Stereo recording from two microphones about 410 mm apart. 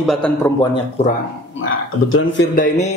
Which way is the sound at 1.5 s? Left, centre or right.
Left.